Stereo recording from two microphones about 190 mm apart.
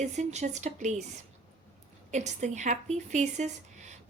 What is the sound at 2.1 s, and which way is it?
Speech, 40° right (ahead or behind).